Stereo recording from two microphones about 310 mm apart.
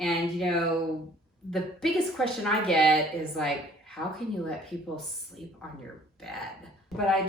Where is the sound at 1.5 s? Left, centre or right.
Centre.